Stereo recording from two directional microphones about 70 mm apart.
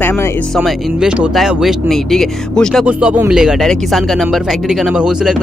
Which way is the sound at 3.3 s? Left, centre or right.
Centre.